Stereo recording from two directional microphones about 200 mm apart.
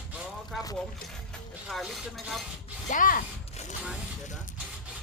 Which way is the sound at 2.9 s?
40° left (ahead or behind).